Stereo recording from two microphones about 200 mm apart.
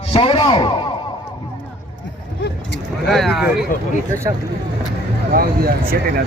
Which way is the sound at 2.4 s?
60° left (ahead or behind).